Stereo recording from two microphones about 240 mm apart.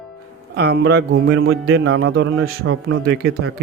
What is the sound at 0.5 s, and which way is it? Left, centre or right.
Speech, right.